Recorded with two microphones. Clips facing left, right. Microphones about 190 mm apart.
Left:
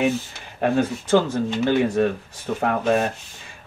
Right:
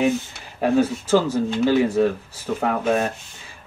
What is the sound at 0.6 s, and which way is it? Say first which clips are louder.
Speech: right 2 dB; 5° right (ahead or behind).